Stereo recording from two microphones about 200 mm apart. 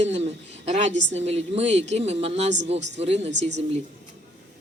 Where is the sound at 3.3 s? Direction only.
60° right (ahead or behind).